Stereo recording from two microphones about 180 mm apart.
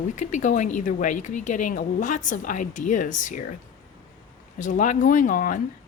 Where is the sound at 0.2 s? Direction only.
40° left (ahead or behind).